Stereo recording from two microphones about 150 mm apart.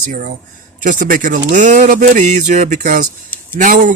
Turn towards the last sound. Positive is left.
turn(degrees=-60)  # may be behind; listen again after turning